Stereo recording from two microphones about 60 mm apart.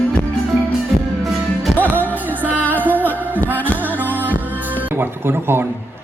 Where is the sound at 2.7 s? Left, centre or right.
Right.